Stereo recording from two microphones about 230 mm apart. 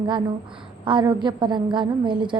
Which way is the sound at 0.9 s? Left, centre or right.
Right.